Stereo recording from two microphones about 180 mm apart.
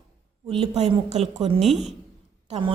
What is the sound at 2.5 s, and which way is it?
Speech, 30° right (ahead or behind).